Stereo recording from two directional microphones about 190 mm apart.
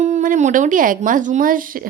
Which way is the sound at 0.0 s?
40° right (ahead or behind).